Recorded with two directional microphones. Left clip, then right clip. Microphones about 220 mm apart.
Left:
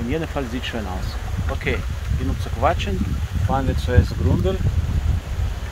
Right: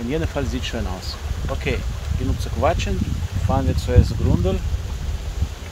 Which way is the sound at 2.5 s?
15° right (ahead or behind).